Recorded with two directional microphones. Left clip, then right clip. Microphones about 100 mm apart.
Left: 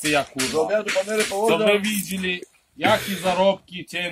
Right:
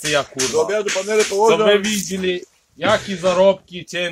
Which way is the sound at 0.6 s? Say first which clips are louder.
Right 2 dB; 80° right.